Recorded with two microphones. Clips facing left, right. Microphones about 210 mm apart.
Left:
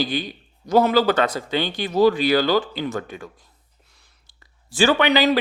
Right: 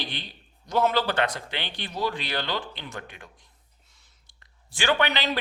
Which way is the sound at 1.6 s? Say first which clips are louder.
Left 11 dB; 40° left (ahead or behind).